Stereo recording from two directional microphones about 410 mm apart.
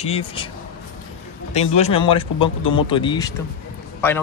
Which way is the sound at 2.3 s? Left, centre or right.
Left.